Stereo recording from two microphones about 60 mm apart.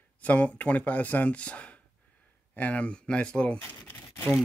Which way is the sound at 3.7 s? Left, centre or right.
Left.